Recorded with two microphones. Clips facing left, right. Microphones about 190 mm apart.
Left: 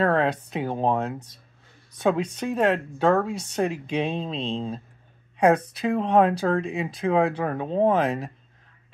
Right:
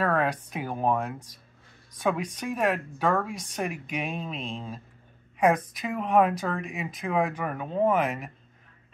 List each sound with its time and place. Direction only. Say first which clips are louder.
0.0 s speech: left 4 dB; 25° left (ahead or behind)